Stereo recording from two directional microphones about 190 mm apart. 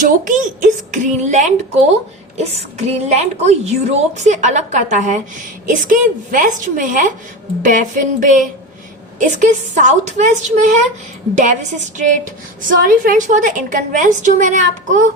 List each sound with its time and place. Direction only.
0.0 s a woman's voice: 45° right (ahead or behind)